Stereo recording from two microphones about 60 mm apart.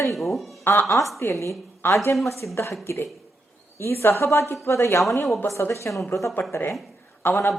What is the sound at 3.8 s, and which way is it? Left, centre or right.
A man's voice, left.